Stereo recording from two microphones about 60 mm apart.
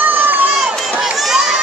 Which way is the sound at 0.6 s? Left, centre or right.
Centre.